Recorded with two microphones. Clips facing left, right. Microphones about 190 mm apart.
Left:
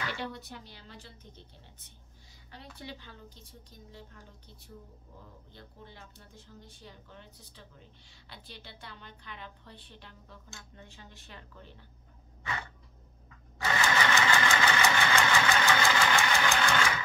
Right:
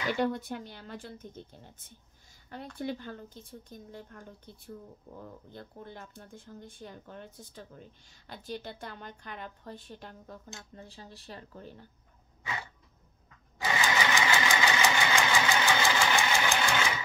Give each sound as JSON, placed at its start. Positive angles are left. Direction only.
{"t": 0.2, "sound": "speech", "side_deg": -50}
{"t": 13.6, "sound": "engine", "side_deg": -15}